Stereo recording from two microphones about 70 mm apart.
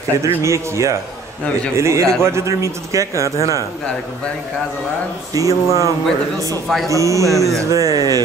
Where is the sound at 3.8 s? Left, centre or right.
Centre.